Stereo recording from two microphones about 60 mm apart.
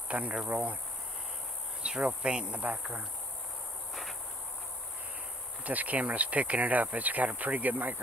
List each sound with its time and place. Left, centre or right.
0.1 s speech: right
1.8 s speech: centre
5.6 s speech: right